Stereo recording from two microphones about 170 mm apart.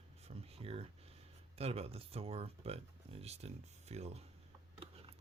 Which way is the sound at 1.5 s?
35° right (ahead or behind).